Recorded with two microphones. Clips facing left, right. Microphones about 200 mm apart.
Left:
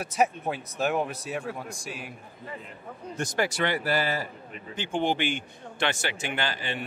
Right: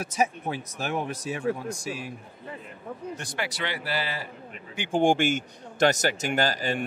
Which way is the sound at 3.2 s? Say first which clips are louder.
Left 11 dB; 45° left (ahead or behind).